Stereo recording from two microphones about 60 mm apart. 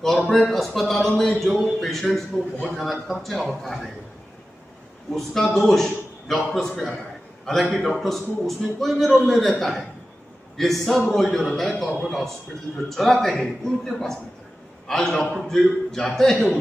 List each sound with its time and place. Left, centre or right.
0.3 s a man's voice: centre
5.1 s a man's voice: centre
7.7 s a man's voice: centre